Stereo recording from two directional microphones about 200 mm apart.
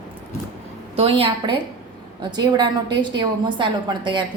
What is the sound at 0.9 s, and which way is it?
A woman's voice, 30° right (ahead or behind).